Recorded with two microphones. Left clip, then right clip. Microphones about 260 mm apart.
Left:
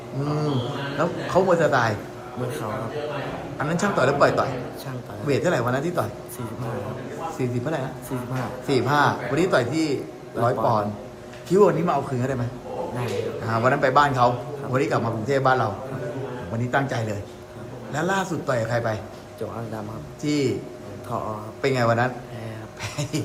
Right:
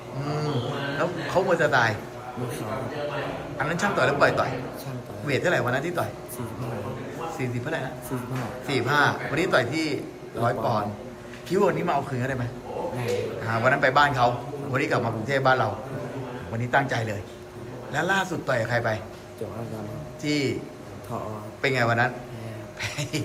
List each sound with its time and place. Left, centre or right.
0.3 s mantra: centre
0.9 s a man's voice: centre
3.6 s a man's voice: centre
7.3 s a man's voice: centre
13.5 s a man's voice: centre
16.7 s a man's voice: centre
20.2 s a man's voice: centre
21.6 s a man's voice: centre